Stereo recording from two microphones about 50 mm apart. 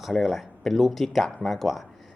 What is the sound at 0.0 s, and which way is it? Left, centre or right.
Speech, centre.